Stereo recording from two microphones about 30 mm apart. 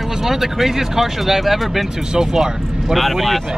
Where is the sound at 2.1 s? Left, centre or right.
Right.